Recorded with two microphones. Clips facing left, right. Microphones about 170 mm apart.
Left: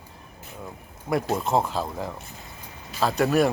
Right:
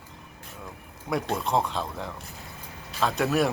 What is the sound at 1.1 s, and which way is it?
A man's voice, centre (ahead or behind).